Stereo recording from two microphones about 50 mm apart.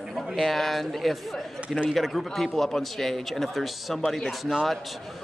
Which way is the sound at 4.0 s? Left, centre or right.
Centre.